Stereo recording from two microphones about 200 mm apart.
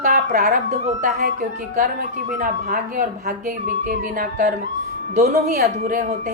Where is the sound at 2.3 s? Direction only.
45° right (ahead or behind).